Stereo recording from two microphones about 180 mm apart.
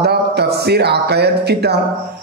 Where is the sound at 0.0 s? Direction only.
65° right (ahead or behind).